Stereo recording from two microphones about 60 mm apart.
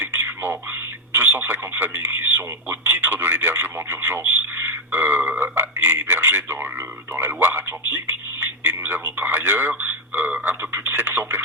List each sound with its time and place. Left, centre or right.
0.0 s telephone: right
7.1 s a sound: right
10.7 s radio: right